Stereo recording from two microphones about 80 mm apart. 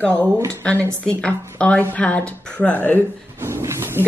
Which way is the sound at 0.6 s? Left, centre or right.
Centre.